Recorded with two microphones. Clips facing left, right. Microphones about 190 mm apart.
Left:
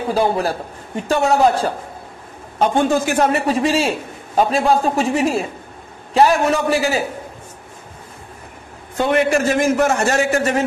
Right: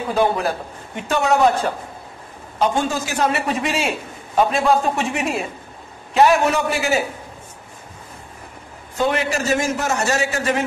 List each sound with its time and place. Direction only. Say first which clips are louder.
0.1 s a man's voice: left 1 dB; 35° left (ahead or behind)
2.7 s a man's voice: left 6 dB; 55° left (ahead or behind)
3.4 s a man's voice: left 5 dB; 35° left (ahead or behind)
8.9 s a man's voice: left 4 dB; 55° left (ahead or behind)